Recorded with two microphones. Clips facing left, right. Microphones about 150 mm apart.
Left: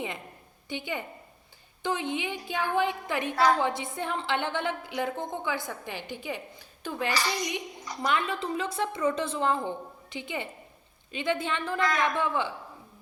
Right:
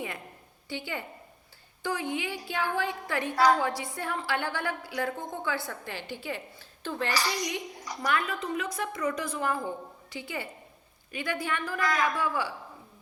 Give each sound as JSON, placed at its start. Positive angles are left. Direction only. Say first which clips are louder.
{"t": 0.7, "sound": "a woman's voice", "louder": "left 2 dB", "side_deg": 20}
{"t": 7.1, "sound": "a child's voice", "louder": "left 1 dB", "side_deg": -10}
{"t": 8.0, "sound": "a woman's voice", "louder": "left 1 dB", "side_deg": 25}
{"t": 11.8, "sound": "a child's voice", "louder": "left 1 dB", "side_deg": -10}
{"t": 12.0, "sound": "a woman's voice", "louder": "left 1 dB", "side_deg": 25}